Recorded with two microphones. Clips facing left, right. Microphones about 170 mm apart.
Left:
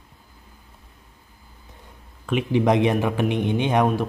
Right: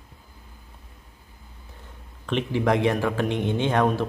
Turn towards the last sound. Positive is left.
turn(degrees=15)  # may be behind; listen again after turning